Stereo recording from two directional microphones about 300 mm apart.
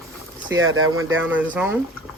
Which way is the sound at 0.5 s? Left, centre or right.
Centre.